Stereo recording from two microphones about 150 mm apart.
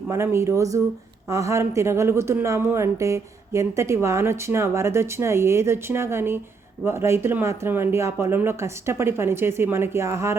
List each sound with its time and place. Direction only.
0.1 s speech: 20° right (ahead or behind)